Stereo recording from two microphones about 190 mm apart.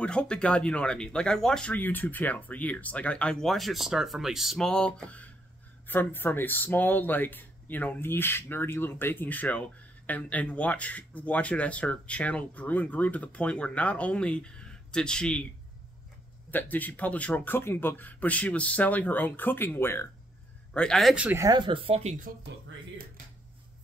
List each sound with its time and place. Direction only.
0.0 s speech: 5° left (ahead or behind)
16.4 s speech: 10° left (ahead or behind); by 21.5 s 10° right (ahead or behind)
21.5 s speech: 25° right (ahead or behind)